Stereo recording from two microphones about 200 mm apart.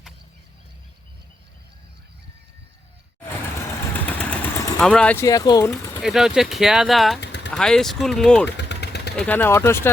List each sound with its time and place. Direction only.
3.9 s vehicle: 5° left (ahead or behind)
4.8 s speech: 5° left (ahead or behind)
6.0 s speech: centre (ahead or behind)
7.2 s a sound: 60° left (ahead or behind)
7.5 s speech: 5° left (ahead or behind)
8.5 s vehicle: 55° left (ahead or behind)
9.1 s speech: 5° left (ahead or behind)